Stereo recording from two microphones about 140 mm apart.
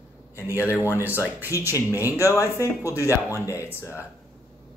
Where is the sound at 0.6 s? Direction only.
15° left (ahead or behind).